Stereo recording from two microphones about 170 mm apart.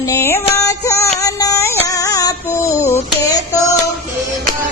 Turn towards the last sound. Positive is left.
turn(degrees=20)  # may be behind; listen again after turning